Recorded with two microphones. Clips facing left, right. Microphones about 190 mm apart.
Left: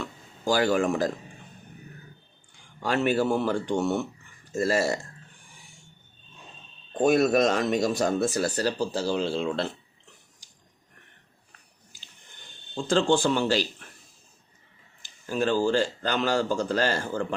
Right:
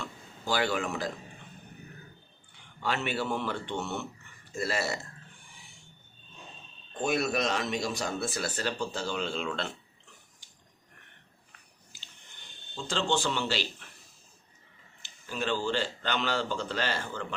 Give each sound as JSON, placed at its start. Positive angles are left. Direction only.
{"t": 0.4, "sound": "speech", "side_deg": 40}
{"t": 2.8, "sound": "speech", "side_deg": 40}
{"t": 7.0, "sound": "speech", "side_deg": 50}
{"t": 12.7, "sound": "speech", "side_deg": 50}
{"t": 15.3, "sound": "speech", "side_deg": 45}